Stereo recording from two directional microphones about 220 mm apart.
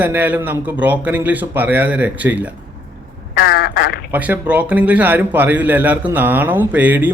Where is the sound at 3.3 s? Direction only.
40° left (ahead or behind).